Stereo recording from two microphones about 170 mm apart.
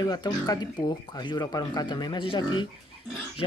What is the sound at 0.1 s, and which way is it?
Speech, 25° left (ahead or behind).